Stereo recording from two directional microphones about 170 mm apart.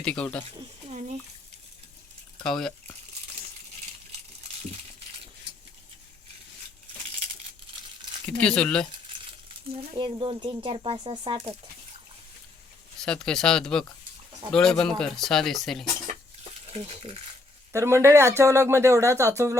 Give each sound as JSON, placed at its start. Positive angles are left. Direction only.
{"t": 0.0, "sound": "speech", "side_deg": 5}
{"t": 0.9, "sound": "speech", "side_deg": -45}
{"t": 2.4, "sound": "speech", "side_deg": 5}
{"t": 8.3, "sound": "speech", "side_deg": 5}
{"t": 9.7, "sound": "speech", "side_deg": -30}
{"t": 13.0, "sound": "speech", "side_deg": 5}
{"t": 16.4, "sound": "stir", "side_deg": -35}
{"t": 17.7, "sound": "speech", "side_deg": -15}